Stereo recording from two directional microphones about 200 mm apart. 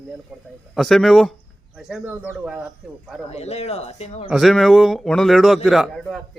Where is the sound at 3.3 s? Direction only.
30° left (ahead or behind).